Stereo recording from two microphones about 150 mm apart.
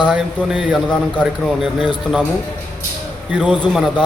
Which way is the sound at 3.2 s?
5° right (ahead or behind).